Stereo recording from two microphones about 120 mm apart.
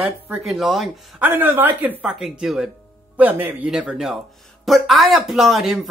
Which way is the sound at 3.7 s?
5° right (ahead or behind).